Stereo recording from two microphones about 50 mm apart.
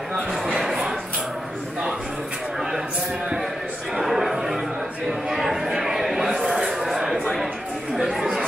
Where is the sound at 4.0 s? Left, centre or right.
Centre.